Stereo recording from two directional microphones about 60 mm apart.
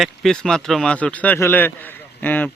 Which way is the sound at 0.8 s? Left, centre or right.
Left.